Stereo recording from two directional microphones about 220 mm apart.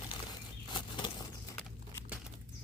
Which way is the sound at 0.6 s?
20° left (ahead or behind).